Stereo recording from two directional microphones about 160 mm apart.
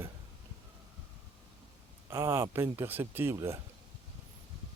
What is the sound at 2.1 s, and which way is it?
Speech, 15° right (ahead or behind).